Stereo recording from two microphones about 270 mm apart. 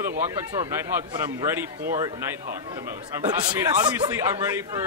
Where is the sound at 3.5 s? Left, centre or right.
Centre.